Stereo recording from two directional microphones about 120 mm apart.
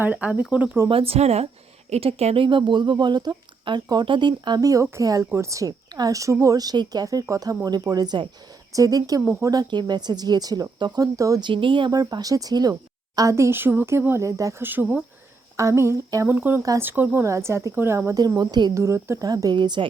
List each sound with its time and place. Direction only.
0.0 s speech: 15° right (ahead or behind)
0.9 s speech: 50° right (ahead or behind); by 11.4 s 30° right (ahead or behind)
11.4 s speech: 45° right (ahead or behind)
11.9 s speech: 30° right (ahead or behind)
14.7 s speech: 15° right (ahead or behind)
18.3 s speech: 35° right (ahead or behind)
18.7 s speech: 25° right (ahead or behind); by 19.9 s 40° right (ahead or behind)